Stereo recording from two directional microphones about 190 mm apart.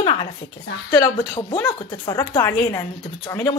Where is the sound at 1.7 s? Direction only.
20° left (ahead or behind).